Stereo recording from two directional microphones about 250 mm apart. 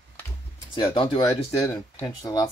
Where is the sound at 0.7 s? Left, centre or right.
Centre.